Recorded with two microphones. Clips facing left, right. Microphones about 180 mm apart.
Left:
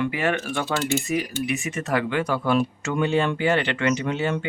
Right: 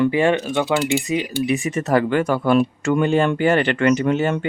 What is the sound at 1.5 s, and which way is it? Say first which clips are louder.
Speech: right 6 dB; 35° right (ahead or behind).